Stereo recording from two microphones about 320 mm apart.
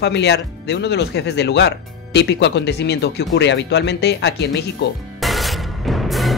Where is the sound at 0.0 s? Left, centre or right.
Left.